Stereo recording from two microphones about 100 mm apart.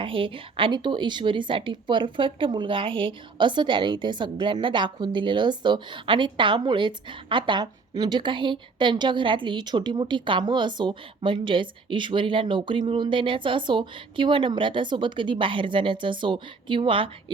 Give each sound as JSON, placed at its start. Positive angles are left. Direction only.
{"t": 0.0, "sound": "a woman's voice", "side_deg": -60}